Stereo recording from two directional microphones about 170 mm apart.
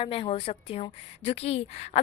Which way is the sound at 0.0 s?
30° left (ahead or behind).